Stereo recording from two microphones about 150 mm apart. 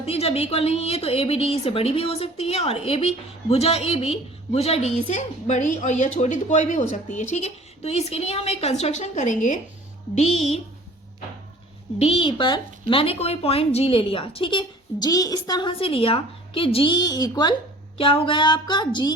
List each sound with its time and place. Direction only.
0.0 s a woman's voice: 45° left (ahead or behind)
11.9 s a woman's voice: 40° left (ahead or behind)
15.8 s a woman's voice: 40° left (ahead or behind)
17.9 s a woman's voice: 40° left (ahead or behind)